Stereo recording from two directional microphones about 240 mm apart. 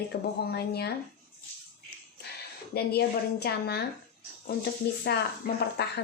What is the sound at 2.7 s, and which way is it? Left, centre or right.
Speech, left.